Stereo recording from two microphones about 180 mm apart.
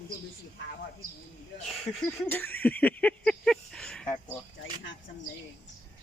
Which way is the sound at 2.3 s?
10° left (ahead or behind).